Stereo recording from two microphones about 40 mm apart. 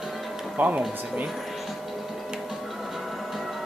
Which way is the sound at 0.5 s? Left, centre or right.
Right.